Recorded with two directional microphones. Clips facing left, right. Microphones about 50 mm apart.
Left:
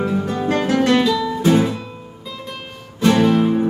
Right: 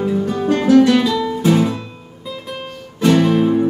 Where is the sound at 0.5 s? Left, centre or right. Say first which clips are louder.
Right 5 dB; left.